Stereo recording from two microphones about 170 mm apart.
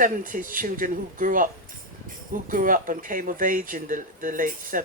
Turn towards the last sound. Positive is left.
turn(degrees=-55)  # may be behind; listen again after turning